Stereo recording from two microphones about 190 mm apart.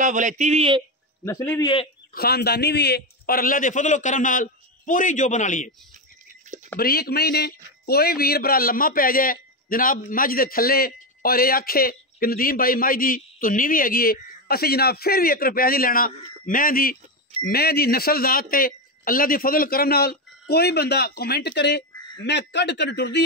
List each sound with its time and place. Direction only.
0.0 s speech: 40° right (ahead or behind)
1.2 s a man's voice: 10° left (ahead or behind)
1.6 s speech: 25° left (ahead or behind)
2.1 s speech: 55° left (ahead or behind); by 5.7 s 40° left (ahead or behind)
6.5 s a sound: 40° right (ahead or behind)
6.8 s a man's voice: 55° left (ahead or behind)